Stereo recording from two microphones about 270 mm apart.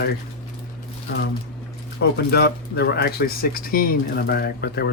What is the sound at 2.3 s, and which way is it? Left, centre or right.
Speech, left.